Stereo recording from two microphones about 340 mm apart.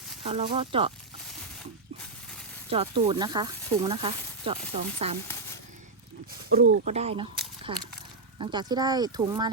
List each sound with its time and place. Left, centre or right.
0.3 s speech: centre
2.6 s speech: centre
6.5 s speech: right
8.4 s speech: centre